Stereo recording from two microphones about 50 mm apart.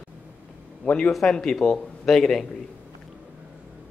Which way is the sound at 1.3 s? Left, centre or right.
Centre.